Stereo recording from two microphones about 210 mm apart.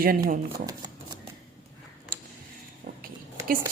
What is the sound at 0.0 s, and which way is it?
Speech, 45° right (ahead or behind).